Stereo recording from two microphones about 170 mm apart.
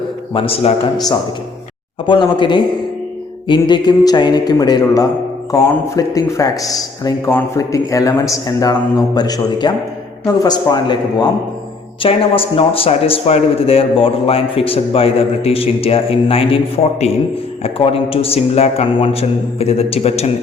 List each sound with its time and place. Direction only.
0.3 s a man's voice: 35° left (ahead or behind)
2.0 s a man's voice: 30° left (ahead or behind)